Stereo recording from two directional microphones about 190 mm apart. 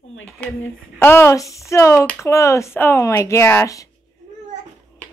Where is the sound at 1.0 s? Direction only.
15° left (ahead or behind).